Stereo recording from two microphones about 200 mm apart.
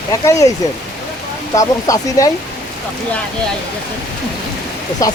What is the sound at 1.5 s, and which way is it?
Speech, 15° left (ahead or behind).